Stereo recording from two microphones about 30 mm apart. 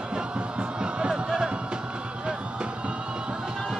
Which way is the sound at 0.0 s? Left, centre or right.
Right.